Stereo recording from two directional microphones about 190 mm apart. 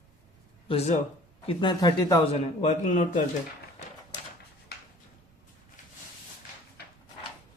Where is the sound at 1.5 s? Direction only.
20° left (ahead or behind).